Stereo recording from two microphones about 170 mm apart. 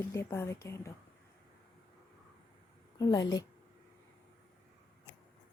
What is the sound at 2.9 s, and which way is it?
Speech, 25° left (ahead or behind).